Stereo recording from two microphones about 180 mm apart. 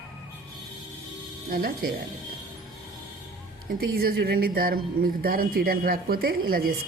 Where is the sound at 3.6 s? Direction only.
55° right (ahead or behind).